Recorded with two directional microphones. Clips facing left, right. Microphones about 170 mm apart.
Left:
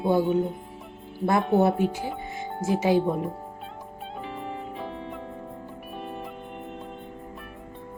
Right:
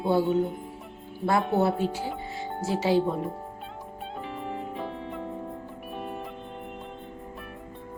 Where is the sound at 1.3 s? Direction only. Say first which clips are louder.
Left 2 dB; 20° left (ahead or behind).